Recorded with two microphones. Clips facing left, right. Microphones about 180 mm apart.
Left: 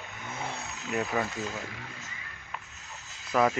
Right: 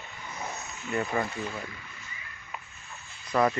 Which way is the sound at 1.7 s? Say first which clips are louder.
Left 4 dB; 90° left.